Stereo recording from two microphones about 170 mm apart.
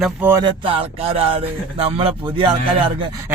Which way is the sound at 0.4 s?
30° right (ahead or behind).